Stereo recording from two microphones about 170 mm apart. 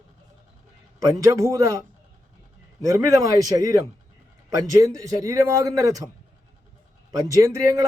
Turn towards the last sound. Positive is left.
turn(degrees=-20)  # may be behind; listen again after turning